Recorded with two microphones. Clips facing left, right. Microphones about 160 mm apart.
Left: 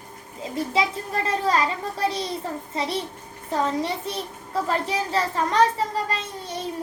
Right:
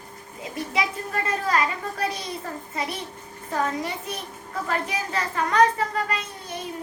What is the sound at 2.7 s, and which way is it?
A child's voice, 30° left (ahead or behind).